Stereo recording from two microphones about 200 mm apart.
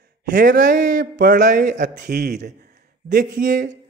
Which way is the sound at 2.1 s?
55° right (ahead or behind).